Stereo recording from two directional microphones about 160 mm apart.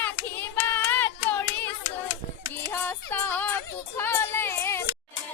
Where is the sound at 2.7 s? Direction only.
10° left (ahead or behind).